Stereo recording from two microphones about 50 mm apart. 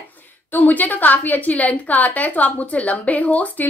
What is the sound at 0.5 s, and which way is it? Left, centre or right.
A woman's voice, left.